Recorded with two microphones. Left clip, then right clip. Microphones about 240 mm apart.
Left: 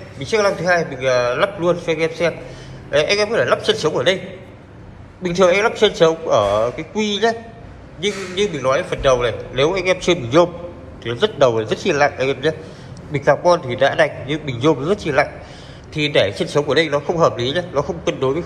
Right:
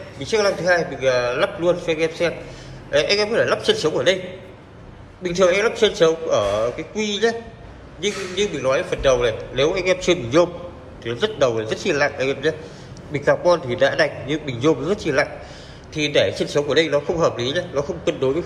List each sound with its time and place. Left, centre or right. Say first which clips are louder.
0.2 s a man's voice: left 2 dB; centre
5.2 s a man's voice: left 3 dB; centre